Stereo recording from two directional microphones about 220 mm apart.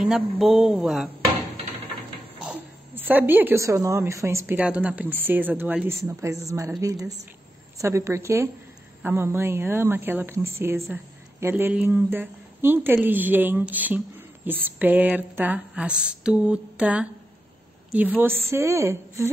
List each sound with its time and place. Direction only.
0.0 s speech: centre (ahead or behind)
2.4 s speech: 10° right (ahead or behind)